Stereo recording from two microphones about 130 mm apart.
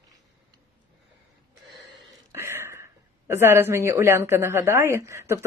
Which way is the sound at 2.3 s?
20° right (ahead or behind).